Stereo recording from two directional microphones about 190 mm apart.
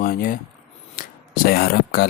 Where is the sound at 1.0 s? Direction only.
50° left (ahead or behind).